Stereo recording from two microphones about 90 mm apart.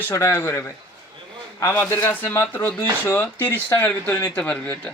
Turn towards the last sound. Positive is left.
turn(degrees=15)  # may be behind; listen again after turning